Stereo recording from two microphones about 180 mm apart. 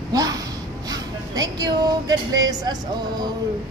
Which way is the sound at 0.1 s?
20° right (ahead or behind).